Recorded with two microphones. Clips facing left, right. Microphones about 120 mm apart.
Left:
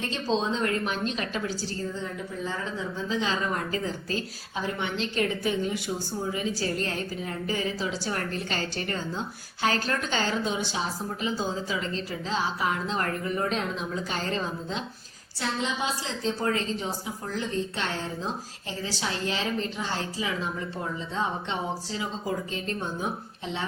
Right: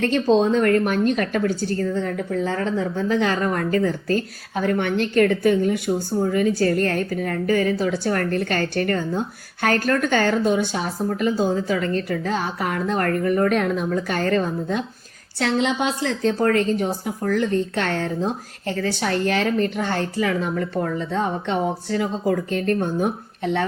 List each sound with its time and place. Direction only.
0.0 s a woman's voice: 60° right (ahead or behind)
15.4 s a woman's voice: 70° right (ahead or behind)